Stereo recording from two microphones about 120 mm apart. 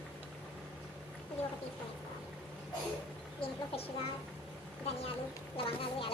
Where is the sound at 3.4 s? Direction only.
55° left (ahead or behind).